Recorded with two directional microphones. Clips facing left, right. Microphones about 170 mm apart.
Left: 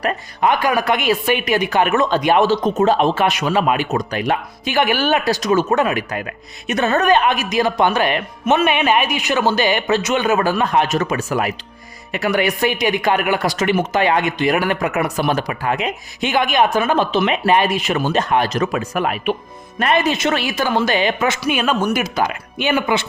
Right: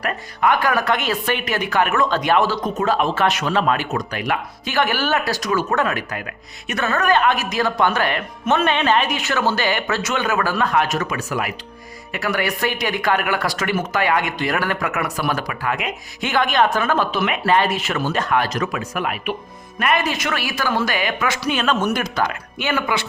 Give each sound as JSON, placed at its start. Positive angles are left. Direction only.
{"t": 0.0, "sound": "speech", "side_deg": 20}
{"t": 12.1, "sound": "speech", "side_deg": 20}
{"t": 21.4, "sound": "speech", "side_deg": 10}